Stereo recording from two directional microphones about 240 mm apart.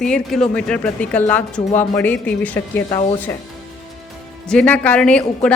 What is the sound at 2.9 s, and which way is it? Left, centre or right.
Speech, centre.